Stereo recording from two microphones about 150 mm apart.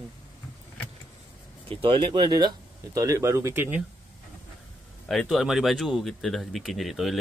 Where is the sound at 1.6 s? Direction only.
35° right (ahead or behind); by 3.8 s 15° right (ahead or behind).